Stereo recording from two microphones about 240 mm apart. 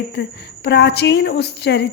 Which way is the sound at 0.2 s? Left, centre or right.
Left.